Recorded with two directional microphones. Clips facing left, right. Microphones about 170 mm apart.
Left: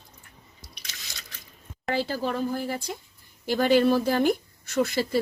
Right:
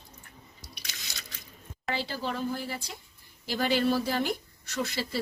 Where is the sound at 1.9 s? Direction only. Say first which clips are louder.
Left 5 dB; 45° left (ahead or behind).